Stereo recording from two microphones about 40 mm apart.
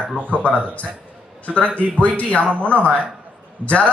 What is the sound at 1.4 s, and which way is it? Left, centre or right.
Speech, left.